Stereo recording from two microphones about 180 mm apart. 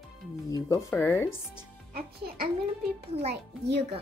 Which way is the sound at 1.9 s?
60° right (ahead or behind).